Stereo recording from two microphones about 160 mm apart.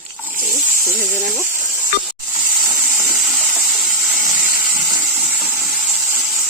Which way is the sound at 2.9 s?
5° right (ahead or behind).